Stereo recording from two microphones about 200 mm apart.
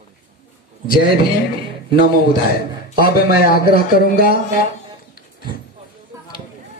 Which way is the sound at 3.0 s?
50° left (ahead or behind).